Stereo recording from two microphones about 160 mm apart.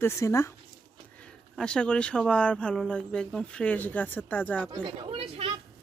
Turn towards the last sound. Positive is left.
turn(degrees=-35)  # may be behind; listen again after turning